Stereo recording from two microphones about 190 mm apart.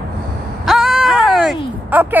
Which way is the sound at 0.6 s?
Centre (ahead or behind).